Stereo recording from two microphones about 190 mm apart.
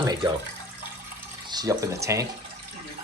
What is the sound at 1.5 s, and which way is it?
Speech, 20° right (ahead or behind).